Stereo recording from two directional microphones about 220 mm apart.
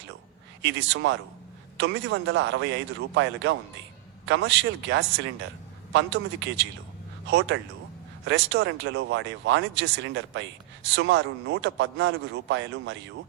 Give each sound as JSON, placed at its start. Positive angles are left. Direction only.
{"t": 0.6, "sound": "speech", "side_deg": -55}